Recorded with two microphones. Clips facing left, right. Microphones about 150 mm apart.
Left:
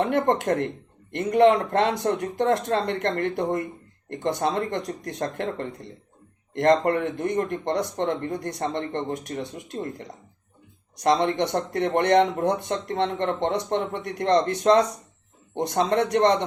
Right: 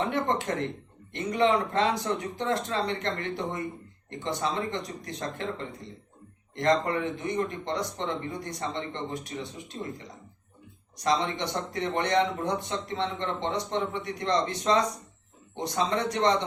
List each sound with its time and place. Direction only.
0.0 s speech: 55° left (ahead or behind)